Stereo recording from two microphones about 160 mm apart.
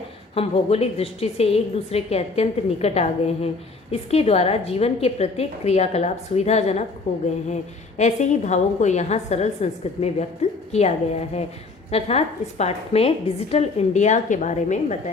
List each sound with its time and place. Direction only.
0.3 s a woman's voice: 40° left (ahead or behind)